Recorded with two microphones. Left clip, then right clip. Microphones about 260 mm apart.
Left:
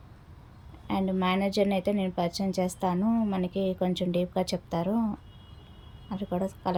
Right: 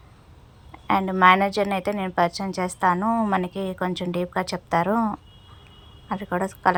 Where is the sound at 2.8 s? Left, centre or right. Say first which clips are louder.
Right 8 dB; right.